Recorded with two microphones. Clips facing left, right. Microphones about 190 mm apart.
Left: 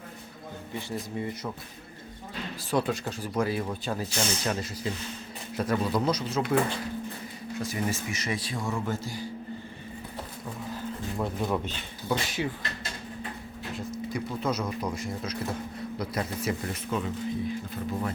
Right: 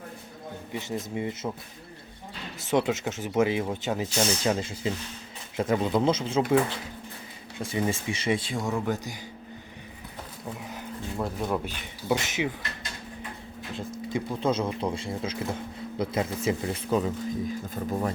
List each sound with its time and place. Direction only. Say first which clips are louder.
0.7 s speech: right 2 dB; 20° right (ahead or behind)
2.6 s speech: right 3 dB; 20° right (ahead or behind)
7.6 s speech: right 3 dB; 25° right (ahead or behind)
11.2 s speech: even; centre (ahead or behind); by 12.5 s 20° right (ahead or behind)
14.1 s speech: right 4 dB; 30° right (ahead or behind)
16.9 s speech: right 4 dB; 35° right (ahead or behind)